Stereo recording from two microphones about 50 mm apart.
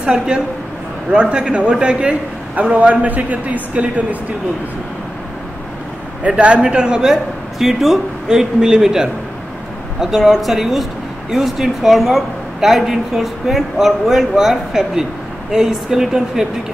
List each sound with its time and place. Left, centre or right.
0.0 s a man's voice: centre
6.2 s a man's voice: right; by 16.4 s centre